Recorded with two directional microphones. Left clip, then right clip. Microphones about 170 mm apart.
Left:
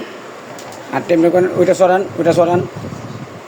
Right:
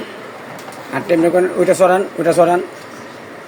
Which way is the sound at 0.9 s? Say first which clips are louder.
Left 1 dB; 10° left (ahead or behind).